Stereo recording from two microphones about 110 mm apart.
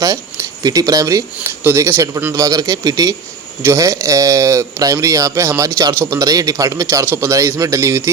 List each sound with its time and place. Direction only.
0.0 s speech: 30° right (ahead or behind)